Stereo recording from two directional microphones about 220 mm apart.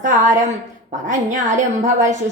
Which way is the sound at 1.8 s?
35° right (ahead or behind).